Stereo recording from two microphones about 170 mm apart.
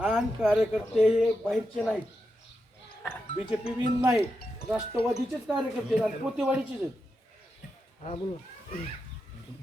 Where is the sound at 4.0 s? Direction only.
15° right (ahead or behind).